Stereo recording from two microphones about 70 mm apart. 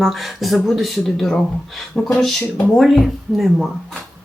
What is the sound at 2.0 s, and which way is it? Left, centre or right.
Speech, centre.